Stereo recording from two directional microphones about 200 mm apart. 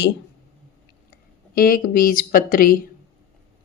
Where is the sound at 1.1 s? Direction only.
45° left (ahead or behind).